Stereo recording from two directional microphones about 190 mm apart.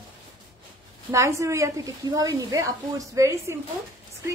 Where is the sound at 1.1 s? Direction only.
15° right (ahead or behind).